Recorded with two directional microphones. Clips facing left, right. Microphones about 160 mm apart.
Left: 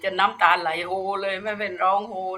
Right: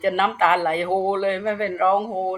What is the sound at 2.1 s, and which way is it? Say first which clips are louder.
Speech: right 5 dB; 45° right (ahead or behind).